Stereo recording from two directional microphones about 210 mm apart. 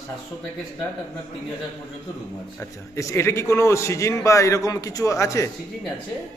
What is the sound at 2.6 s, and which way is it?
A man's voice, 15° left (ahead or behind).